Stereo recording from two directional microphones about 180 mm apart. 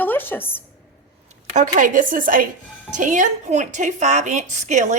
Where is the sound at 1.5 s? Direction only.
45° right (ahead or behind).